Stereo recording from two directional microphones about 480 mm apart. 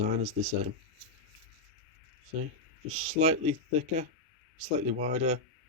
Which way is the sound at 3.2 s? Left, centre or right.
Centre.